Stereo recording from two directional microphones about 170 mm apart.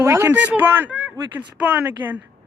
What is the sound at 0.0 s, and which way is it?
Speech, 15° right (ahead or behind).